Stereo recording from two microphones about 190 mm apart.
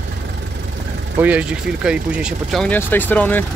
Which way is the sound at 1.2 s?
5° right (ahead or behind).